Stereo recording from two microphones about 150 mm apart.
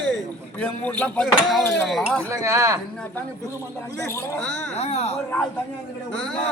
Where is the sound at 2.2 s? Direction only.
20° right (ahead or behind).